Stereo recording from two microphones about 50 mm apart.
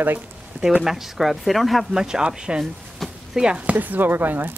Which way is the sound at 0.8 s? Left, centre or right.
Centre.